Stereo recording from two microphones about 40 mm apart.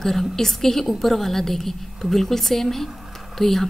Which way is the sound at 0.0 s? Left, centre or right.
Centre.